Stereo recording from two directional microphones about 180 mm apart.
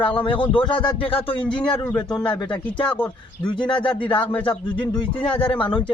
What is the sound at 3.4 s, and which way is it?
Speech, 25° left (ahead or behind).